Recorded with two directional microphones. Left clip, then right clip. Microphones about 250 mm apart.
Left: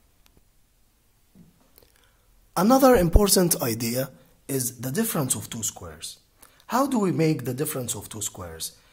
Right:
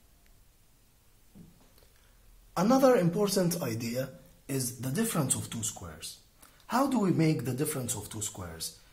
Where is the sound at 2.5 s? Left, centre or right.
Left.